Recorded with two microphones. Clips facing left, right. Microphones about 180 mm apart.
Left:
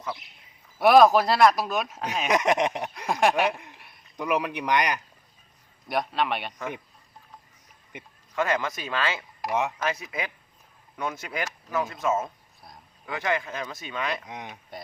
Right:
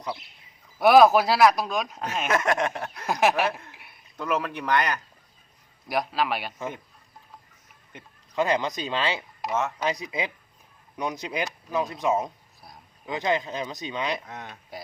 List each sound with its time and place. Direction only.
0.8 s speech: centre (ahead or behind)
2.3 s speech: 20° left (ahead or behind)
3.1 s speech: centre (ahead or behind)
3.7 s a sound: centre (ahead or behind)
4.2 s speech: 15° left (ahead or behind)
5.9 s speech: centre (ahead or behind)
8.4 s speech: 20° right (ahead or behind)
9.4 s speech: 15° left (ahead or behind)
9.7 s speech: 15° right (ahead or behind)
14.3 s speech: 15° left (ahead or behind)